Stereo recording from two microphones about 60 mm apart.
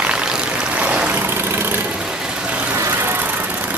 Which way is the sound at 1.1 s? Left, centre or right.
Right.